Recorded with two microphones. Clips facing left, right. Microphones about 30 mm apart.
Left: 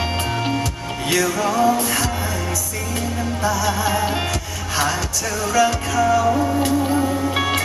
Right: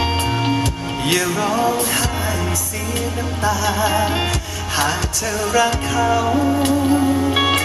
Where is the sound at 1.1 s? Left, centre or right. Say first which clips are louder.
Even; centre.